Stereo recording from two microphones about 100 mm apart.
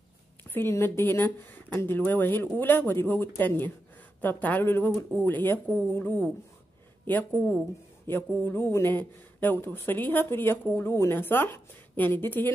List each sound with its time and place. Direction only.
0.4 s speech: 20° left (ahead or behind)